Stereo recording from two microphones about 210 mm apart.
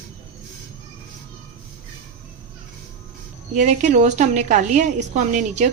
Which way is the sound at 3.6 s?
35° right (ahead or behind).